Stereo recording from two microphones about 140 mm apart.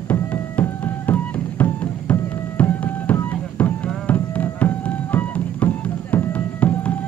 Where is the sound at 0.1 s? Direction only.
10° left (ahead or behind).